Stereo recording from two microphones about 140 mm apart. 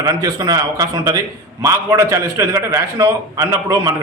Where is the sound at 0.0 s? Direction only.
25° right (ahead or behind).